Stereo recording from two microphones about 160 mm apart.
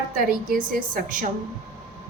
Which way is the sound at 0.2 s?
60° right (ahead or behind).